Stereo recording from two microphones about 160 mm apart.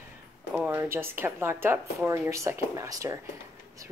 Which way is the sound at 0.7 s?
15° right (ahead or behind).